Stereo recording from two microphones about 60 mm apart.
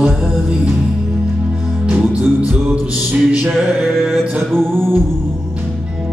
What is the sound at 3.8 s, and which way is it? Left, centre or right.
Music, centre.